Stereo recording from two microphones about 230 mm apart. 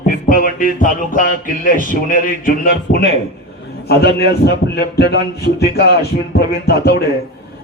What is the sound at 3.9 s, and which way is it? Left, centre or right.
Music, left.